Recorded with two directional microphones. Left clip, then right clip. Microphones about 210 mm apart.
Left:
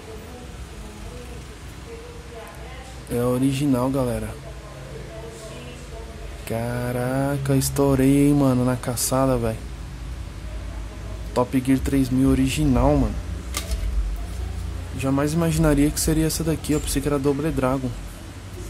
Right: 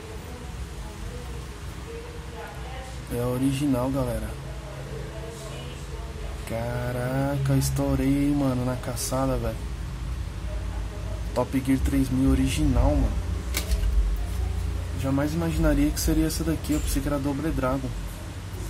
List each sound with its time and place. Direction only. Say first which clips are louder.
3.2 s speech: left 5 dB; 30° left (ahead or behind)
6.5 s mantra: left 4 dB; 30° left (ahead or behind)
11.3 s speech: left 4 dB; 30° left (ahead or behind)
15.0 s speech: left 4 dB; 50° left (ahead or behind)